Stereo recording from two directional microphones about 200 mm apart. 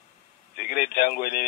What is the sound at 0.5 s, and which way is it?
Speech, 45° left (ahead or behind).